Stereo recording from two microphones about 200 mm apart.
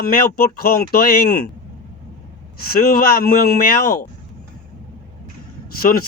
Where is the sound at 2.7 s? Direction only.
50° left (ahead or behind).